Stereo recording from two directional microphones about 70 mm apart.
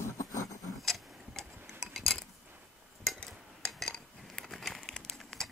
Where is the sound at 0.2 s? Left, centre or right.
Left.